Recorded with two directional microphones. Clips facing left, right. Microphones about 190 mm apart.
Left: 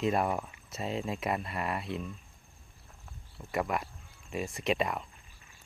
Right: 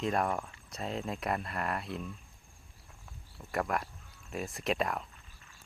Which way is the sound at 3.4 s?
Centre (ahead or behind).